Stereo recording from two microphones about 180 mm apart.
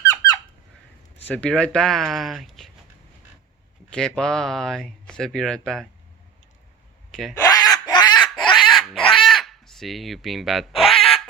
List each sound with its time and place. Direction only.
0.0 s squeak: 20° left (ahead or behind)
1.3 s speech: 5° left (ahead or behind)
3.8 s speech: 5° left (ahead or behind)
7.1 s speech: centre (ahead or behind)
7.3 s a sound: 20° left (ahead or behind)
8.6 s pig: centre (ahead or behind)
9.2 s crow: centre (ahead or behind)